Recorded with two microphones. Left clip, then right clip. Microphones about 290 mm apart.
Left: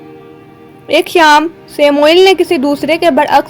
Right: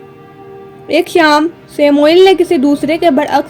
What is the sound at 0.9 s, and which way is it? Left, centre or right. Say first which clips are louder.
A woman's voice: left 2 dB; left.